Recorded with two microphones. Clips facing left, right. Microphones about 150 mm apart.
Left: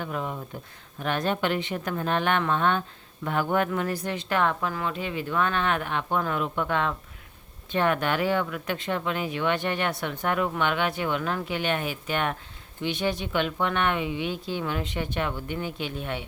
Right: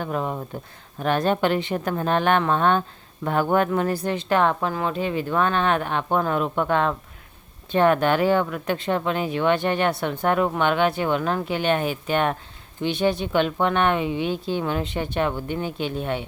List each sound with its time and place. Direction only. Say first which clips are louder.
0.0 s a woman's voice: right 5 dB; 40° right (ahead or behind)